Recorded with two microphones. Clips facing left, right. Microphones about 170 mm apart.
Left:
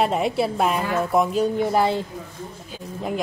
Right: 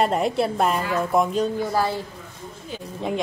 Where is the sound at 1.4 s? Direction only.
20° left (ahead or behind).